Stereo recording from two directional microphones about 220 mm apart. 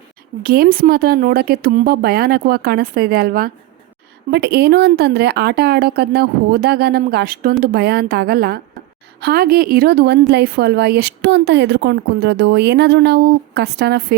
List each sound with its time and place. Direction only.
0.4 s a woman's voice: 45° right (ahead or behind)